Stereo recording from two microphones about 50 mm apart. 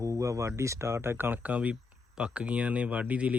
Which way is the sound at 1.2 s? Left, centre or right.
Right.